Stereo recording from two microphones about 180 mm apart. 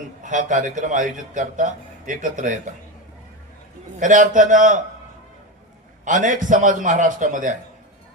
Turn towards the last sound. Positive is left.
turn(degrees=-45)  # may be behind; listen again after turning